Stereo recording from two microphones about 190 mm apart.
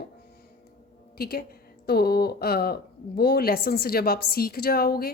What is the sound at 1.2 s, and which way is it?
Speech, 55° left (ahead or behind).